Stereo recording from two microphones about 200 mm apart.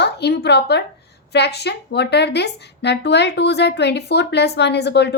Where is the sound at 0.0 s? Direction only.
55° left (ahead or behind).